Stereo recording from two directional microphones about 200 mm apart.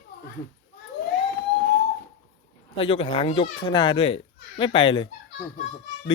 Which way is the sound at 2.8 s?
25° left (ahead or behind).